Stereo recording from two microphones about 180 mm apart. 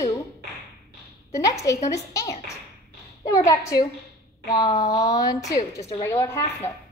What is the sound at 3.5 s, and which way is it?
A woman's voice, 20° left (ahead or behind).